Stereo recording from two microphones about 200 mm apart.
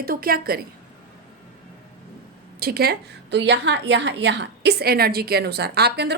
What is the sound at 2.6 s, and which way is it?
A woman's voice, 50° right (ahead or behind).